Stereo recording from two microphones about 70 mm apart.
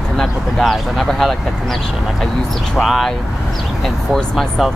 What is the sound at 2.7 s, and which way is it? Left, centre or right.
Speech, centre.